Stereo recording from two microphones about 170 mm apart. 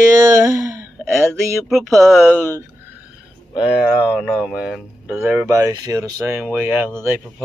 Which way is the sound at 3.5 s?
5° right (ahead or behind).